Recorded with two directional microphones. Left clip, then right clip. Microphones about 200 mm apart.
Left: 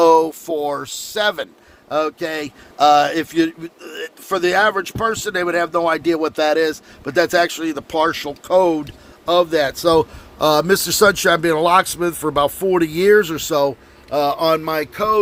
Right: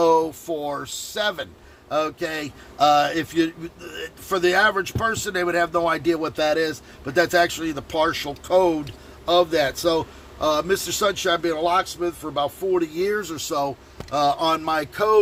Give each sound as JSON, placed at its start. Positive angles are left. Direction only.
{"t": 0.0, "sound": "speech", "side_deg": 50}
{"t": 14.1, "sound": "speech", "side_deg": 10}